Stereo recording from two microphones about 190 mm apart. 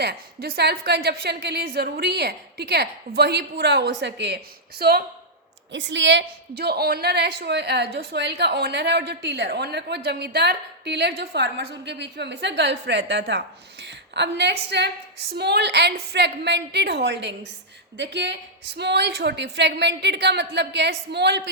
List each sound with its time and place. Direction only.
0.0 s a woman's voice: 55° right (ahead or behind)
5.7 s a woman's voice: 70° right (ahead or behind)